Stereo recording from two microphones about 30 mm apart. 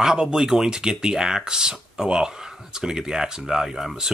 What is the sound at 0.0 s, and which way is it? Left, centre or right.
Speech, right.